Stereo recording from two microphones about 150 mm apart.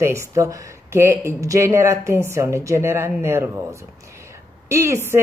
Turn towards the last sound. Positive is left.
turn(degrees=-20)  # may be behind; listen again after turning